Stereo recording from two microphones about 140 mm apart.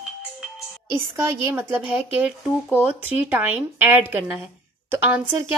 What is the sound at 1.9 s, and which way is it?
Speech, 5° right (ahead or behind).